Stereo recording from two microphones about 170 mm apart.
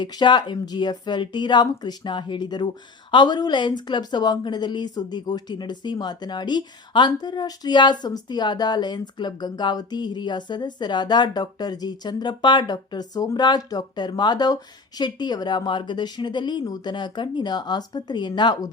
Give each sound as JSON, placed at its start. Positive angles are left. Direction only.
{"t": 0.0, "sound": "speech", "side_deg": 25}